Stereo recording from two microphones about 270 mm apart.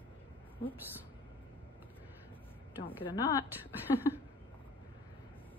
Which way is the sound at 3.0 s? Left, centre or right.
Centre.